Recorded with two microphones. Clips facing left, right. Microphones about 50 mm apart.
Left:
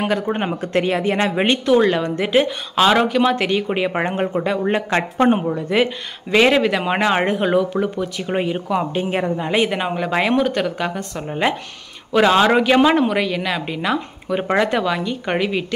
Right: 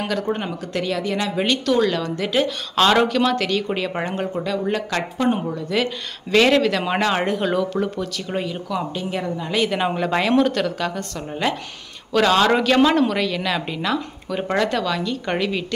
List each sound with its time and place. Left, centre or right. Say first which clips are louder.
0.4 s speech: left 6 dB; left
2.7 s speech: left 1 dB; centre; by 9.7 s left
9.7 s speech: even; centre